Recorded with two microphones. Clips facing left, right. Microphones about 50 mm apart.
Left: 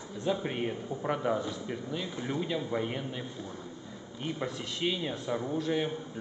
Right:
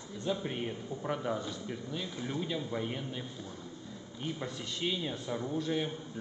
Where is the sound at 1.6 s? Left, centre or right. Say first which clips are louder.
Left 3 dB; centre.